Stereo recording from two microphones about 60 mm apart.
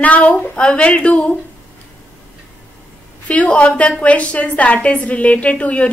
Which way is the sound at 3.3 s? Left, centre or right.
Left.